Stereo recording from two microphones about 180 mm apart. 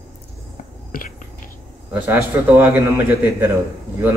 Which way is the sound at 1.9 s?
10° right (ahead or behind).